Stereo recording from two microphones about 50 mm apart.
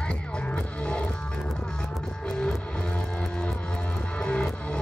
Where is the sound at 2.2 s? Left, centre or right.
Centre.